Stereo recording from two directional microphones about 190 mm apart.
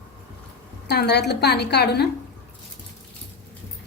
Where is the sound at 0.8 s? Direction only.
60° left (ahead or behind).